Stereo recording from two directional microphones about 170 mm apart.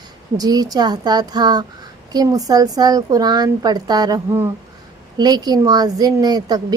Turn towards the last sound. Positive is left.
turn(degrees=-20)  # may be behind; listen again after turning